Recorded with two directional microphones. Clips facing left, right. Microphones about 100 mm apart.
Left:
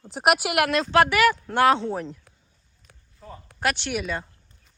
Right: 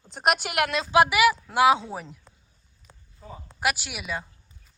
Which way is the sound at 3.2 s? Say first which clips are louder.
Left 1 dB; 10° right (ahead or behind).